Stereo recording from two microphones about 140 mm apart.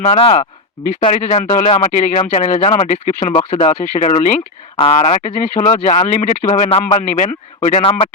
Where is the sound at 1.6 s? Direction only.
65° left (ahead or behind).